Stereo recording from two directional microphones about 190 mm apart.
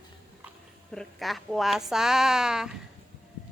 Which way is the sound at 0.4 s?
Centre (ahead or behind).